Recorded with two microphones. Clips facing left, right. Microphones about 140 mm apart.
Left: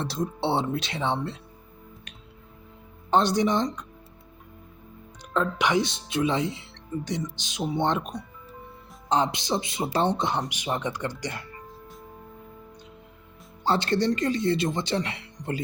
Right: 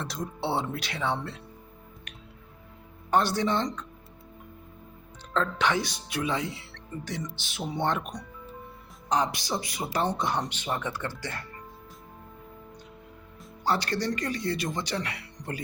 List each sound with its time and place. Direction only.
0.0 s speech: 25° left (ahead or behind)
3.1 s speech: 20° left (ahead or behind)
5.3 s speech: 15° left (ahead or behind)
9.0 s speech: 25° left (ahead or behind)
13.7 s speech: 25° left (ahead or behind)